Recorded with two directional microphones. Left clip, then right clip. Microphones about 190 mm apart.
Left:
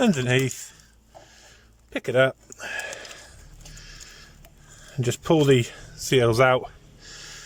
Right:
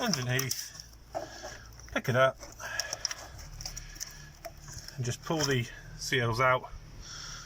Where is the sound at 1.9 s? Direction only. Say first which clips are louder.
Left 5 dB; 55° left (ahead or behind).